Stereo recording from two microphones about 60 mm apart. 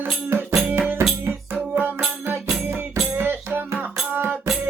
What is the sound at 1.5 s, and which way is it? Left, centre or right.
Music, right.